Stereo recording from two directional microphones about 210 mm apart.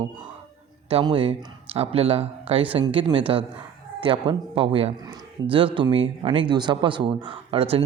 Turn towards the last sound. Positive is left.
turn(degrees=-30)  # may be behind; listen again after turning